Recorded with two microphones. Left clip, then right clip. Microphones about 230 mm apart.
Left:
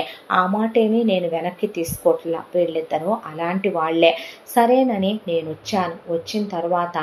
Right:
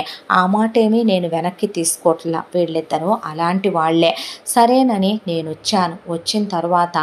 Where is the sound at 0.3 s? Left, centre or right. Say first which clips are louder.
Right 4 dB; right.